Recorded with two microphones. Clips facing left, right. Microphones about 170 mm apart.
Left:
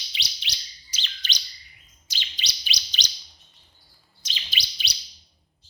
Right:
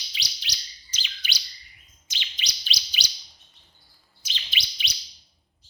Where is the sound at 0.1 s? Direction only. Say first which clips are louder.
Left 2 dB; 20° left (ahead or behind).